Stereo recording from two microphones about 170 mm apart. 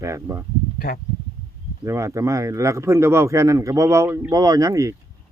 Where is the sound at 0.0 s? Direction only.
20° right (ahead or behind).